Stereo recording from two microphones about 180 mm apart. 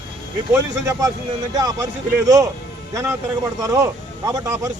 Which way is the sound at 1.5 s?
20° right (ahead or behind).